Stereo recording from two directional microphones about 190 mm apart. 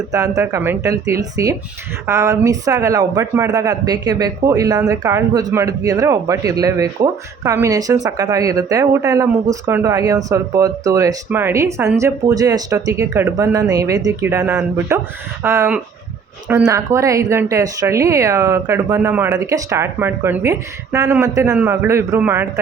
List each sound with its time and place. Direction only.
0.1 s speech: 15° right (ahead or behind)